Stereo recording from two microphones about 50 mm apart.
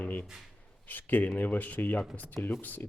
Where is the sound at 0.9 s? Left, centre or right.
Left.